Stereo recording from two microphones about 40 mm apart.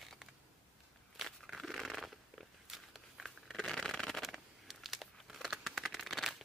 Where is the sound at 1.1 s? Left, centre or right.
Centre.